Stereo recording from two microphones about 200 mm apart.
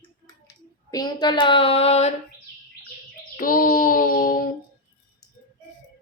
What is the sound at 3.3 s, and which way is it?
Child singing, 45° left (ahead or behind).